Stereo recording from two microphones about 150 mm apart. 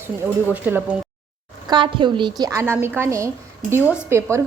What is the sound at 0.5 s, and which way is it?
Speech, 10° right (ahead or behind).